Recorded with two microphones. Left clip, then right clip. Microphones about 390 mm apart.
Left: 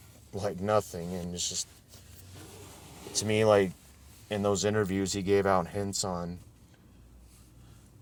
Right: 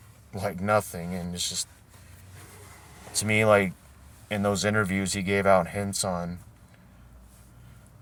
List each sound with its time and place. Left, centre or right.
0.3 s speech: left
3.2 s speech: left